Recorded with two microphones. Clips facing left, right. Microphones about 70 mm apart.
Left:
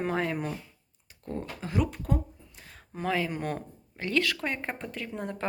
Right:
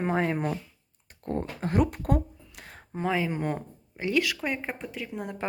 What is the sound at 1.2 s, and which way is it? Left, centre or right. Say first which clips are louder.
Speech: right 5 dB; right.